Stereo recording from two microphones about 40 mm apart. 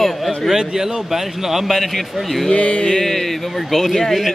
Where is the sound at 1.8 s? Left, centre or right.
Centre.